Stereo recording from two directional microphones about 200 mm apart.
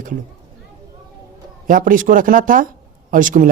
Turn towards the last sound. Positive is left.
turn(degrees=-40)  # may be behind; listen again after turning